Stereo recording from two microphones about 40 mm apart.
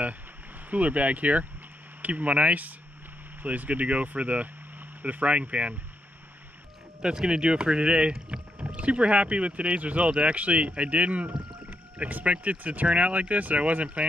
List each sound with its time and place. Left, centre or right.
0.7 s speech: right
7.0 s speech: right